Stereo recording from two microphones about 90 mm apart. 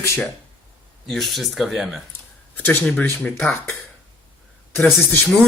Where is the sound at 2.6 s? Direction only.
25° left (ahead or behind).